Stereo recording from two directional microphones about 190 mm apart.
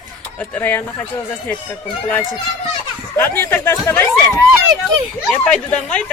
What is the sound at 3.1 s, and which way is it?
Speech, 10° left (ahead or behind).